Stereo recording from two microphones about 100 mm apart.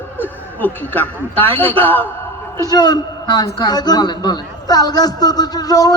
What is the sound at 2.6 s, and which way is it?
A man's voice, 40° left (ahead or behind).